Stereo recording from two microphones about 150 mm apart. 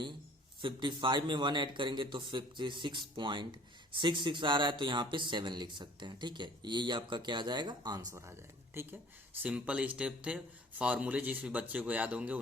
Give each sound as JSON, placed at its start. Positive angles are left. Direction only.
{"t": 0.6, "sound": "a man's voice", "side_deg": -30}
{"t": 8.1, "sound": "speech", "side_deg": -15}